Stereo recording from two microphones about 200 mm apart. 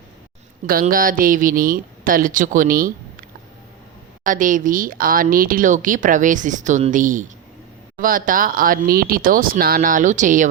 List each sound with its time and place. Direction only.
0.7 s speech: 45° right (ahead or behind)
4.2 s speech: 40° right (ahead or behind)